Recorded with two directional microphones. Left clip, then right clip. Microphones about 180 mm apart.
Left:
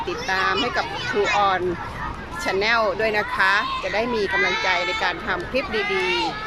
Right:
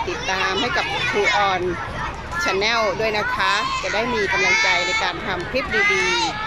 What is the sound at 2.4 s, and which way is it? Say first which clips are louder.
A child's voice: even; centre (ahead or behind).